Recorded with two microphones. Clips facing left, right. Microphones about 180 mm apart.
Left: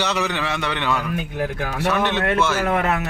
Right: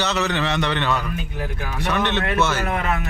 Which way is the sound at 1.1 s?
55° left (ahead or behind).